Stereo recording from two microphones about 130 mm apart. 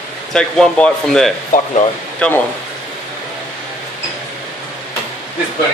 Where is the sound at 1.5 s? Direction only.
90° left.